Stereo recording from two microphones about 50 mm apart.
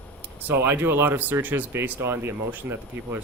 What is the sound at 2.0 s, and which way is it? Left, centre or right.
Speech, right.